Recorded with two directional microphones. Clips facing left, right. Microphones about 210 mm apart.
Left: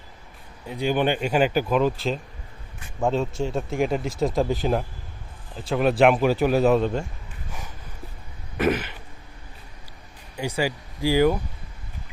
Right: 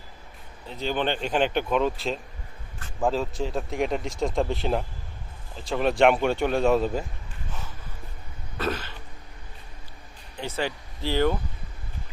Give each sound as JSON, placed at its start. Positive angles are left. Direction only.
{"t": 0.7, "sound": "speech", "side_deg": 10}
{"t": 8.5, "sound": "throat clearing", "side_deg": 15}
{"t": 10.3, "sound": "speech", "side_deg": 10}